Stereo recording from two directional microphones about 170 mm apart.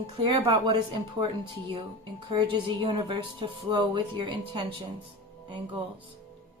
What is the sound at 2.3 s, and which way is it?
A woman's voice, 30° right (ahead or behind).